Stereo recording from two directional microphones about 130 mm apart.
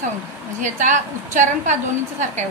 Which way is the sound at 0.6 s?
75° right (ahead or behind).